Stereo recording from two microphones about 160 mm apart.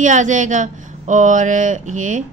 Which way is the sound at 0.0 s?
50° right (ahead or behind).